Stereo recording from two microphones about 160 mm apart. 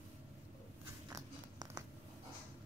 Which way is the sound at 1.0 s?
20° right (ahead or behind).